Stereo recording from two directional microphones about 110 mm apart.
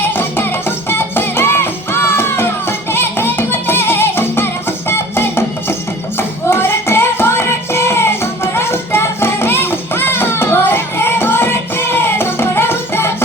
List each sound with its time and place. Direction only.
0.1 s music: 20° left (ahead or behind)